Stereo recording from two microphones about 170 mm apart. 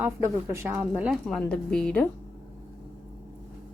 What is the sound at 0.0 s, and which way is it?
A woman's voice, 15° right (ahead or behind).